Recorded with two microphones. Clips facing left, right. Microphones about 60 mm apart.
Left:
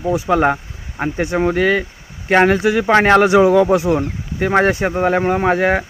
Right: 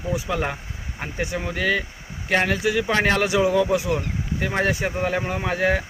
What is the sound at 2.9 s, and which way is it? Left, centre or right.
Speech, left.